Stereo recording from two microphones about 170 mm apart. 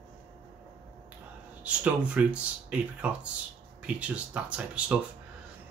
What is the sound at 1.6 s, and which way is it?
Speech, 5° right (ahead or behind).